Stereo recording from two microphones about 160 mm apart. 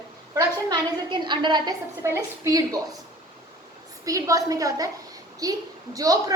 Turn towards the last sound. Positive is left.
turn(degrees=-20)  # may be behind; listen again after turning